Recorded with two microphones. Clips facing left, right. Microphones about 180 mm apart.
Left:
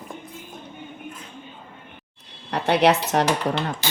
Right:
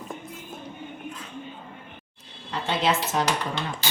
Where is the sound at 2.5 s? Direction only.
70° left (ahead or behind).